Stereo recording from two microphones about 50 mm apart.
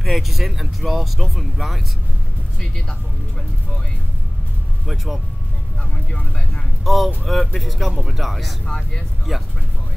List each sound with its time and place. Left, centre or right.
0.0 s speech: centre
4.8 s speech: centre
6.8 s speech: centre
8.6 s speech: centre
9.3 s speech: centre